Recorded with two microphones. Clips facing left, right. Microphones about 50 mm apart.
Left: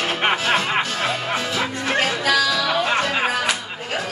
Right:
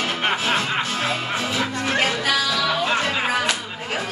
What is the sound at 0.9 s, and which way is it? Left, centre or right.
Music, centre.